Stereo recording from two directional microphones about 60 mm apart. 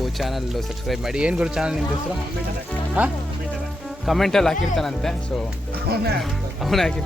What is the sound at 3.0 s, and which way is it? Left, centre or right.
Speech, right.